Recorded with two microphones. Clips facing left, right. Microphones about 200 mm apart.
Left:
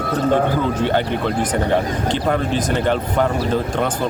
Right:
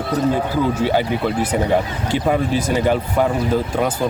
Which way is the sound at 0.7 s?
5° right (ahead or behind).